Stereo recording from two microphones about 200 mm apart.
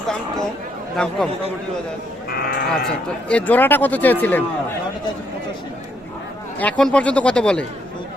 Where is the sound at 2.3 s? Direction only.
50° left (ahead or behind).